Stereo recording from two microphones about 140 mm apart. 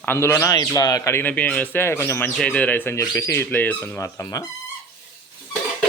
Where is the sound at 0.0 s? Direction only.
15° left (ahead or behind).